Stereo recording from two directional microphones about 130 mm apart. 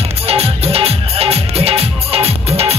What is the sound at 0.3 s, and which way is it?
Music, 50° right (ahead or behind).